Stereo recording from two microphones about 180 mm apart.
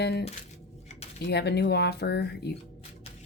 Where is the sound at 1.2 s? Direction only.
65° left (ahead or behind).